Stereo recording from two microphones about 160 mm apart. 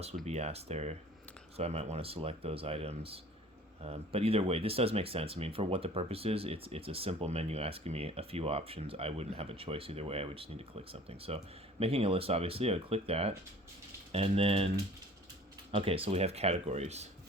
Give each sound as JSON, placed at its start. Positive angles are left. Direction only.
{"t": 0.3, "sound": "speech", "side_deg": -40}
{"t": 15.7, "sound": "speech", "side_deg": -35}